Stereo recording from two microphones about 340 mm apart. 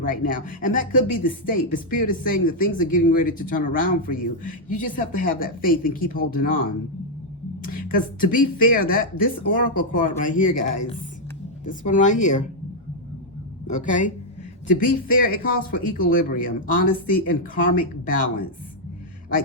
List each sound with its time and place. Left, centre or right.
0.0 s speech: left
13.7 s speech: left